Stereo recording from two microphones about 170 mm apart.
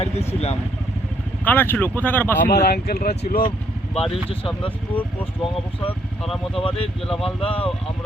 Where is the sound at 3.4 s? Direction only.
30° left (ahead or behind).